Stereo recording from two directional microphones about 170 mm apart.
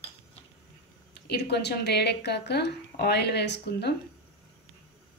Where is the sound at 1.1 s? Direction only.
75° left (ahead or behind).